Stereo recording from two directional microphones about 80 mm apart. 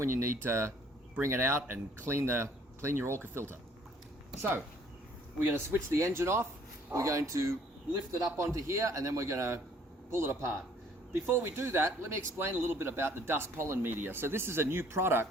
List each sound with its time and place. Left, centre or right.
0.0 s speech: right
5.5 s speech: right